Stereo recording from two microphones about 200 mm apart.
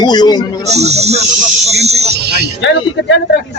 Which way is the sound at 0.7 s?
35° right (ahead or behind).